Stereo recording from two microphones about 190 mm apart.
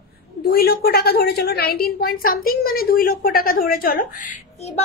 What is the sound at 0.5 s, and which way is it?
A woman's voice, 55° left (ahead or behind).